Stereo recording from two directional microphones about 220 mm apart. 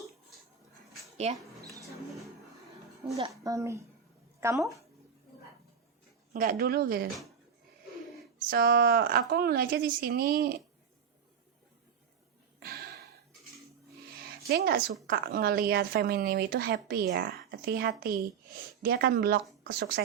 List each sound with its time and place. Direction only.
1.4 s mouse: 15° right (ahead or behind)
3.2 s speech: 20° right (ahead or behind)
6.3 s speech: 40° right (ahead or behind)
8.4 s speech: 45° right (ahead or behind)
12.5 s gasp: 45° right (ahead or behind)
14.4 s speech: 45° right (ahead or behind)